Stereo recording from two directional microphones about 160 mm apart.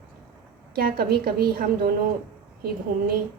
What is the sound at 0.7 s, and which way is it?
A woman's voice, 75° right (ahead or behind).